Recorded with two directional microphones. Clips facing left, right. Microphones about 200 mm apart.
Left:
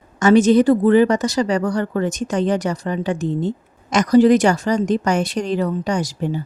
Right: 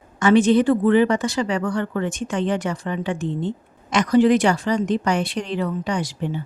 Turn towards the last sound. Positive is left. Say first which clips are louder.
# left 3 dB
turn(degrees=40)  # may be behind; listen again after turning